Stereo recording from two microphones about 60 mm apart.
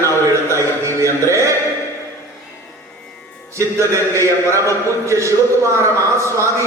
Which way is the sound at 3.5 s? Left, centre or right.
Right.